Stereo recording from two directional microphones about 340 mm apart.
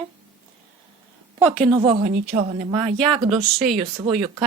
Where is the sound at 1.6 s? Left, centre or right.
Centre.